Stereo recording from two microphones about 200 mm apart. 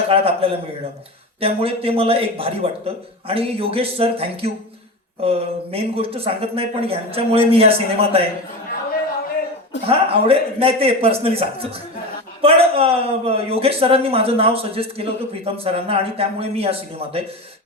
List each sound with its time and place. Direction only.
0.1 s a man's voice: 30° right (ahead or behind)
9.8 s a man's voice: 30° right (ahead or behind)